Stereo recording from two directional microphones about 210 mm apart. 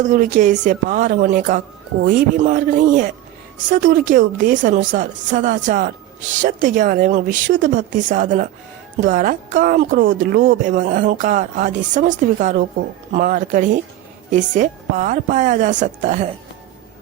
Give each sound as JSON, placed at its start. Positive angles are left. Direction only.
{"t": 0.0, "sound": "speech", "side_deg": -40}